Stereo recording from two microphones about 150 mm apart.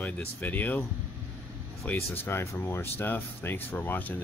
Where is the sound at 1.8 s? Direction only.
15° left (ahead or behind).